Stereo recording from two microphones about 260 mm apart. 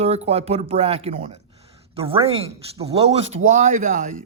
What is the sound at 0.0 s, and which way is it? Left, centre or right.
A man's voice, right.